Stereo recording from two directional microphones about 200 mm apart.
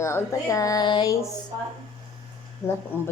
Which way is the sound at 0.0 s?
15° left (ahead or behind).